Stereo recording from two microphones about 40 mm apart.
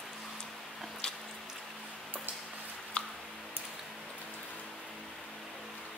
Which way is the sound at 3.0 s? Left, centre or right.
Left.